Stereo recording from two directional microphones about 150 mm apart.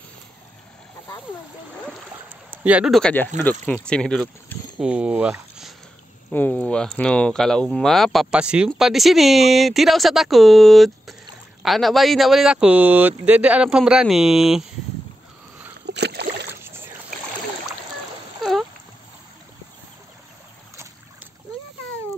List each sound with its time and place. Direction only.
2.5 s speech: 10° right (ahead or behind)
4.8 s speech: 5° right (ahead or behind)
6.3 s speech: 10° left (ahead or behind)
16.0 s rowboat: 90° right
18.4 s a sound: centre (ahead or behind)